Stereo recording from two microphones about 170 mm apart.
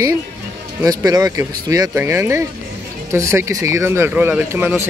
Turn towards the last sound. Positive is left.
turn(degrees=-15)  # may be behind; listen again after turning